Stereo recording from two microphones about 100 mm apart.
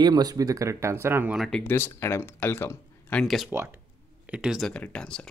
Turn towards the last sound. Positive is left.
turn(degrees=10)  # may be behind; listen again after turning